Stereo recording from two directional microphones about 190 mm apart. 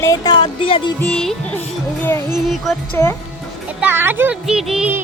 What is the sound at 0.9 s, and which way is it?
Music, 5° left (ahead or behind).